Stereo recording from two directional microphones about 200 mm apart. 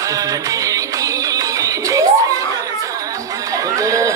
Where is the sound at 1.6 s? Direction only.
15° right (ahead or behind).